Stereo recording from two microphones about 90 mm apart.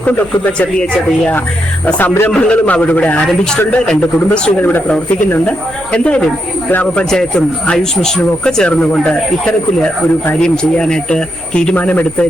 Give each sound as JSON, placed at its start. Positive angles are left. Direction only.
{"t": 0.0, "sound": "speech", "side_deg": 20}
{"t": 7.1, "sound": "speech", "side_deg": 10}